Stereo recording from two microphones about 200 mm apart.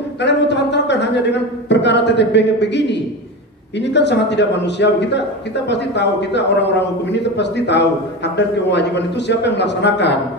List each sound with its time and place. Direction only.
0.2 s a man's voice: 60° left (ahead or behind)